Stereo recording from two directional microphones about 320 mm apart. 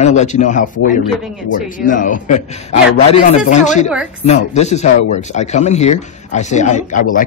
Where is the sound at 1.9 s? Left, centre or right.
Left.